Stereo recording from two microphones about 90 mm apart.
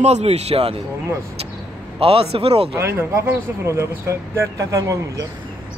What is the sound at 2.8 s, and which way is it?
A man's voice, 30° right (ahead or behind).